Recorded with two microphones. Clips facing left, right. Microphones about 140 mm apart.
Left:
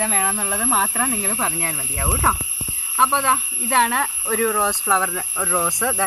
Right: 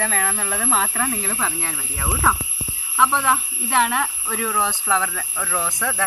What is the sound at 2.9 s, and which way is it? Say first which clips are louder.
Speech: even; 25° left (ahead or behind).